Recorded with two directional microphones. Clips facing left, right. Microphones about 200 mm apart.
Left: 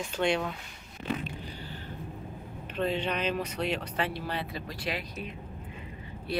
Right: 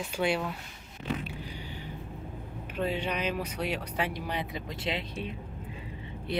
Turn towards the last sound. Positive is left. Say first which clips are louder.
# even
turn(degrees=-20)  # may be behind; listen again after turning